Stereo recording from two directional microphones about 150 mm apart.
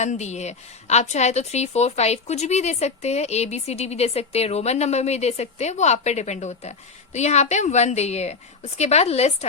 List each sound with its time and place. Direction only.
0.0 s speech: 50° left (ahead or behind)